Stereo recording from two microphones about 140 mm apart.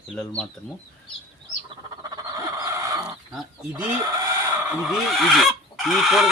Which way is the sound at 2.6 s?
25° right (ahead or behind).